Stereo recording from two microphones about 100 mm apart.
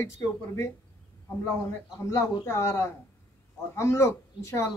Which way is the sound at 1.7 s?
25° left (ahead or behind).